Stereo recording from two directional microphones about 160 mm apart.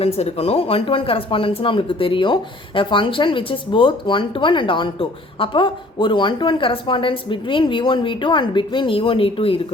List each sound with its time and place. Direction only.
0.0 s speech: 40° left (ahead or behind)